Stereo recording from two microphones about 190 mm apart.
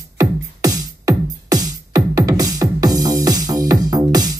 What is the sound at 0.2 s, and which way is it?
Music, 20° right (ahead or behind).